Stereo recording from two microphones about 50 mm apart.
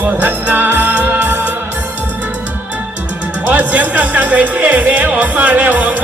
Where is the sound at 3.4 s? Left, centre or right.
Right.